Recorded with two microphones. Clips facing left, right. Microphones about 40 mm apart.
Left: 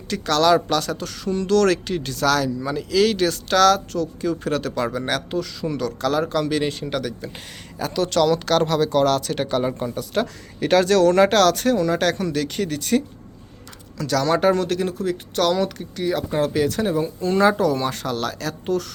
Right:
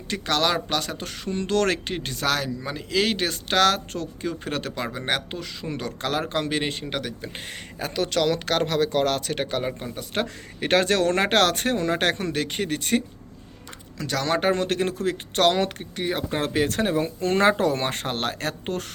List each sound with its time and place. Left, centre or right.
0.1 s speech: right
4.2 s speech: centre
14.0 s speech: right
14.8 s speech: right
16.4 s speech: right